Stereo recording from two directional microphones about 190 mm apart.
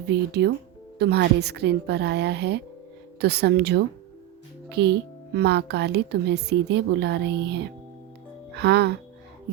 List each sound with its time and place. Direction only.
0.1 s speech: 60° right (ahead or behind)